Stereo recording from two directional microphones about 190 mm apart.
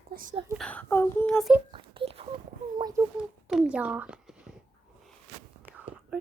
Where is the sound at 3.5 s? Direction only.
5° right (ahead or behind).